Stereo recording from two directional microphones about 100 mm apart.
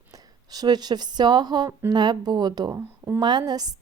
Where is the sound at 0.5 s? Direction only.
40° right (ahead or behind).